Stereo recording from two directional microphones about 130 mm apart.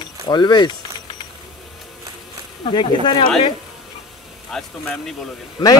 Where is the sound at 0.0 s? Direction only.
35° left (ahead or behind).